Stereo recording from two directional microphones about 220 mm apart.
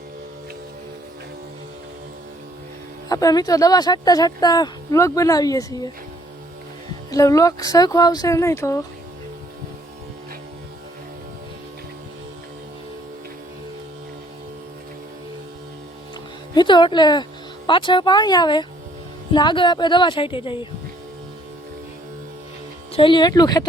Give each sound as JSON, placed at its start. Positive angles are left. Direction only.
{"t": 3.1, "sound": "speech", "side_deg": 15}
{"t": 7.1, "sound": "speech", "side_deg": 15}
{"t": 16.6, "sound": "a woman's voice", "side_deg": 20}
{"t": 23.0, "sound": "speech", "side_deg": 20}